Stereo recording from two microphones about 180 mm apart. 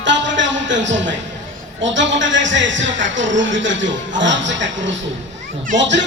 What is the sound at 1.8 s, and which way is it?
A man's voice, 90° right.